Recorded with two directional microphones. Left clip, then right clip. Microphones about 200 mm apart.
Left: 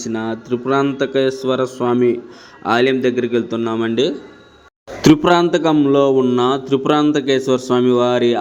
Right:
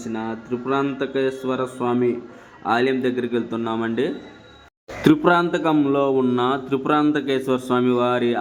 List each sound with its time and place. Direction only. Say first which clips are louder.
0.1 s a man's voice: left 6 dB; 25° left (ahead or behind)